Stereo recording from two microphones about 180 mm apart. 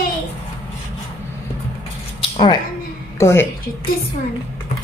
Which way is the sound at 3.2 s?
15° left (ahead or behind).